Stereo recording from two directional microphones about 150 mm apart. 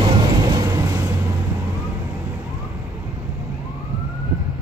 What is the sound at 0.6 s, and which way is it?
Vehicle, 20° right (ahead or behind).